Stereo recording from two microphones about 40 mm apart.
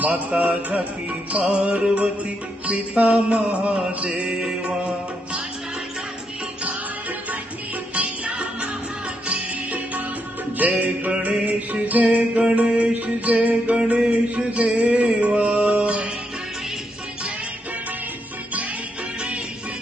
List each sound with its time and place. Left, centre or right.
0.0 s music: right
7.9 s music: right
12.9 s music: right